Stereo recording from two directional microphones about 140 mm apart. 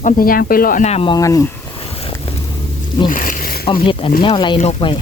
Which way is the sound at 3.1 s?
75° left (ahead or behind).